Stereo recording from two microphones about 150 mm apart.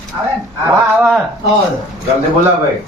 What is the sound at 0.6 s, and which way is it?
Speech, 20° right (ahead or behind).